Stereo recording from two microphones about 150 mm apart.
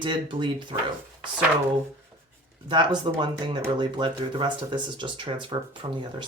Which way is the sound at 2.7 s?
30° right (ahead or behind).